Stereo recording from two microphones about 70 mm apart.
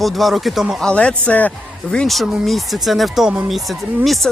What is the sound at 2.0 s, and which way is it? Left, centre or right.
Speech, centre.